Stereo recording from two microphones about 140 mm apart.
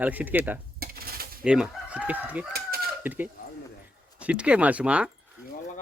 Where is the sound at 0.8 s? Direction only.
90° right.